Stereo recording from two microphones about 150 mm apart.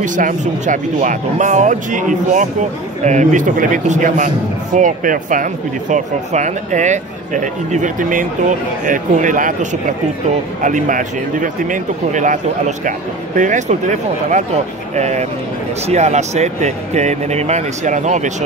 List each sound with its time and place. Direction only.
0.0 s speech: 60° right (ahead or behind)